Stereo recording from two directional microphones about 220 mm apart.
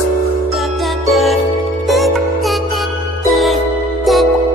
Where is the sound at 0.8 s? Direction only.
Centre (ahead or behind).